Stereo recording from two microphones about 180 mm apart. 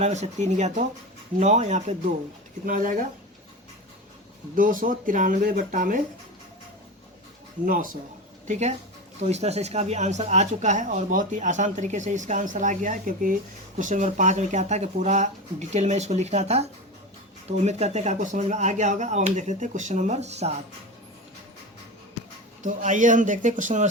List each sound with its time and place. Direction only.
0.0 s speech: 40° right (ahead or behind)
4.5 s speech: 50° right (ahead or behind)
7.6 s speech: 50° right (ahead or behind)
22.6 s speech: 45° right (ahead or behind)